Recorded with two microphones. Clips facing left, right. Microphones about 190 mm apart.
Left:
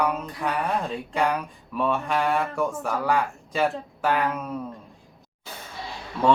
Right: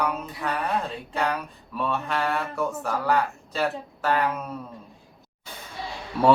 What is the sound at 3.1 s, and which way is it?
Speech, 10° left (ahead or behind).